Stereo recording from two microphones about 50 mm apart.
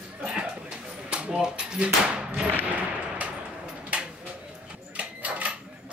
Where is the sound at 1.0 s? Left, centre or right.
Centre.